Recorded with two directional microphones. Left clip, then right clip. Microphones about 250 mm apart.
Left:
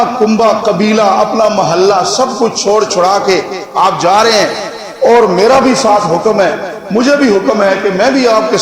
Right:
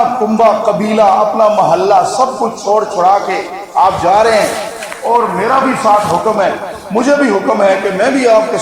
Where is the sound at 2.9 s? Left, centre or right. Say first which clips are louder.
Left 1 dB; left.